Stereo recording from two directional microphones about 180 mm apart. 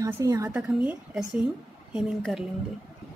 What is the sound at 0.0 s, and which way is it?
Speech, 20° right (ahead or behind).